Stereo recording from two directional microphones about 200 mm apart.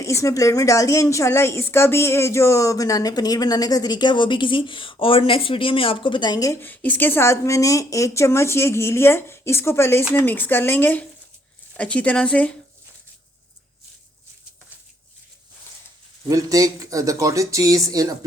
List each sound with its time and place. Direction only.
0.0 s a woman's voice: 15° left (ahead or behind)
16.3 s speech: 15° right (ahead or behind)